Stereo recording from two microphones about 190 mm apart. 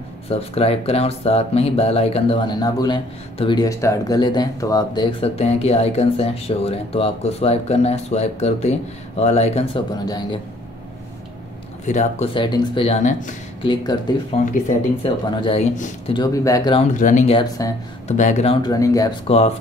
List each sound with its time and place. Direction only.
0.3 s speech: 30° left (ahead or behind)
10.0 s speech: 20° left (ahead or behind)
11.8 s speech: 40° left (ahead or behind)
12.4 s speech: 25° left (ahead or behind)
13.6 s speech: 25° left (ahead or behind)
14.3 s speech: 40° left (ahead or behind)
15.0 s speech: 30° left (ahead or behind)
16.2 s speech: 20° left (ahead or behind)
16.9 s speech: 40° left (ahead or behind); by 17.7 s 20° left (ahead or behind)
18.0 s speech: 40° left (ahead or behind)
18.6 s speech: 20° left (ahead or behind)
19.2 s speech: 35° left (ahead or behind)